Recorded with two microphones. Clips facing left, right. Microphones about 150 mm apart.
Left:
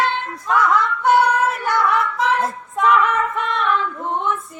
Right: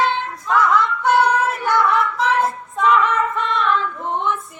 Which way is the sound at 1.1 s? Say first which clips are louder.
Right 1 dB; centre (ahead or behind).